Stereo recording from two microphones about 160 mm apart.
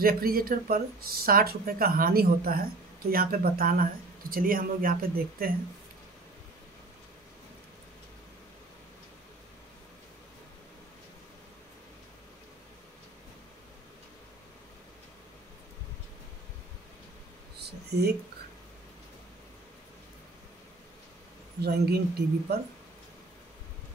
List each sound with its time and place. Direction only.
0.0 s speech: 65° right (ahead or behind)
17.6 s a sound: 90° right
21.5 s speech: 85° right